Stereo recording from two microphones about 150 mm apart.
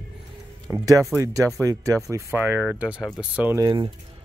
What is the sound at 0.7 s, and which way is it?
Speech, 15° right (ahead or behind).